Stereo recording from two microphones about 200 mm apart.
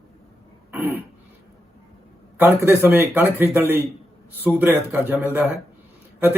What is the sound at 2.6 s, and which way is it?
Speech, 10° right (ahead or behind).